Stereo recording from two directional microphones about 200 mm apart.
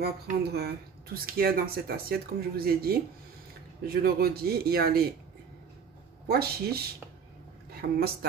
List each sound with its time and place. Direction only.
0.0 s speech: 50° right (ahead or behind)
6.2 s speech: 55° right (ahead or behind)
7.8 s a woman's voice: 55° right (ahead or behind)